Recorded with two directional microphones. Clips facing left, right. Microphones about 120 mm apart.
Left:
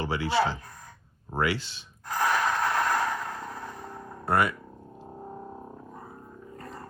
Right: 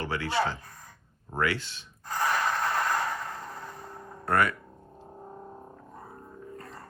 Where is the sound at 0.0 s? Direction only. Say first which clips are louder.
Left 3 dB; 25° left (ahead or behind).